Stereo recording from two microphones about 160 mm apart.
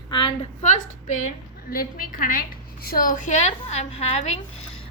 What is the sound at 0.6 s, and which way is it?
A woman's voice, 50° left (ahead or behind).